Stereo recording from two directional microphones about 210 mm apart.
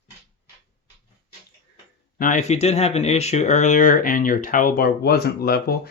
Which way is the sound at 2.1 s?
40° left (ahead or behind).